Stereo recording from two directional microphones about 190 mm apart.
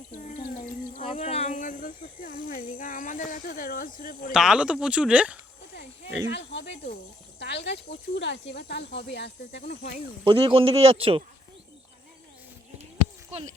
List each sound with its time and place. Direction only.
0.2 s speech: 40° left (ahead or behind)
4.3 s speech: 5° right (ahead or behind)
6.3 s speech: 70° left (ahead or behind)
10.2 s a man's voice: 30° right (ahead or behind)